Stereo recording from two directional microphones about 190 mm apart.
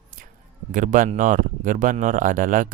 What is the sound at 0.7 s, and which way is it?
Speech, 45° right (ahead or behind).